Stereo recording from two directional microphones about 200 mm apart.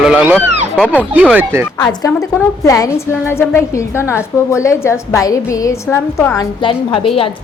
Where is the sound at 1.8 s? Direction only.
20° left (ahead or behind).